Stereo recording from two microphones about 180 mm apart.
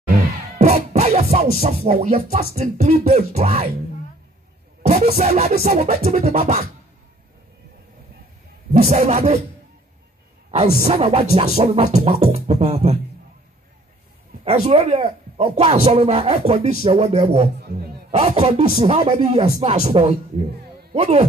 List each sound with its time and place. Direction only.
0.6 s music: 40° right (ahead or behind)
1.9 s speech: 35° right (ahead or behind)
4.8 s speech: 40° right (ahead or behind)
8.8 s speech: 40° right (ahead or behind)
10.5 s speech: 35° right (ahead or behind)
14.4 s speech: 35° right (ahead or behind)
17.6 s a sound: 60° right (ahead or behind)
18.1 s speech: 30° right (ahead or behind)